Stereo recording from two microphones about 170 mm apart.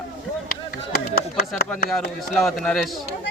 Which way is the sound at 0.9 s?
65° left (ahead or behind).